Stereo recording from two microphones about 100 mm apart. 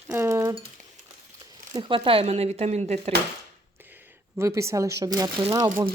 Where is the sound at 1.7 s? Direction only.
60° right (ahead or behind); by 2.9 s 90° right.